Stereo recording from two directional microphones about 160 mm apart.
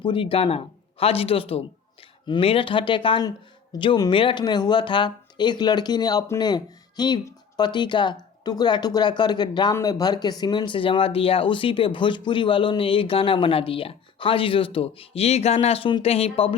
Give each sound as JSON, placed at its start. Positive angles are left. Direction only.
{"t": 0.0, "sound": "speech", "side_deg": 30}